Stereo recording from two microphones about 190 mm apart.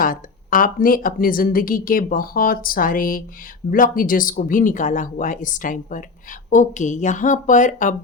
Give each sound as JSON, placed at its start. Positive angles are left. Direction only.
{"t": 0.0, "sound": "a woman's voice", "side_deg": 45}